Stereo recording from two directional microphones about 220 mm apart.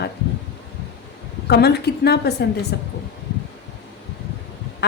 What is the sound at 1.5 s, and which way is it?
A woman's voice, 45° left (ahead or behind).